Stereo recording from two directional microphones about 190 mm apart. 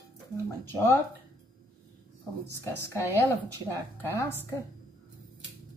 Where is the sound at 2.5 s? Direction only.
15° left (ahead or behind).